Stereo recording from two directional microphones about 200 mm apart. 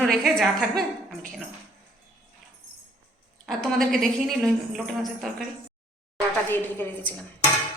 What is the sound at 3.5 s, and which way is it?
A woman's voice, centre (ahead or behind).